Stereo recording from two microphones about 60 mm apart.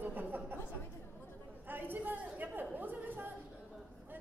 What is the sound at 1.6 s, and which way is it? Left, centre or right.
A woman's voice, right.